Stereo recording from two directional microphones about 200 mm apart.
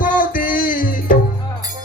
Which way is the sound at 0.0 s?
45° left (ahead or behind).